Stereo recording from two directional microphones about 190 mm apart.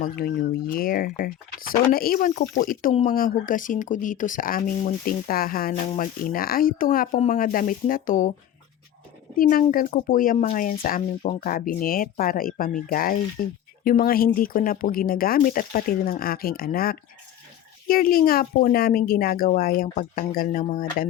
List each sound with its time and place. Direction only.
0.0 s speech: 50° left (ahead or behind)
9.3 s speech: 45° left (ahead or behind)